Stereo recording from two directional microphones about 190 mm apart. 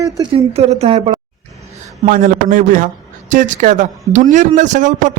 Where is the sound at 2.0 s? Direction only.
45° right (ahead or behind).